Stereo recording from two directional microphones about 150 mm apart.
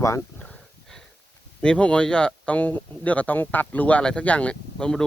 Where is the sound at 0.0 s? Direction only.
20° left (ahead or behind).